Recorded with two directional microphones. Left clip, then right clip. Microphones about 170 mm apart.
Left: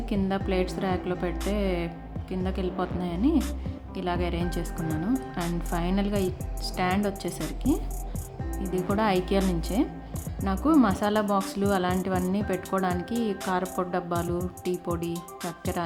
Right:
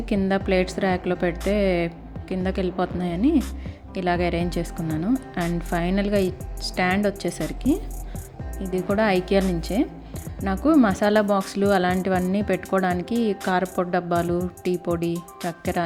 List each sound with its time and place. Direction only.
0.1 s speech: 25° right (ahead or behind)
8.9 s speech: 20° right (ahead or behind)
15.1 s speech: centre (ahead or behind)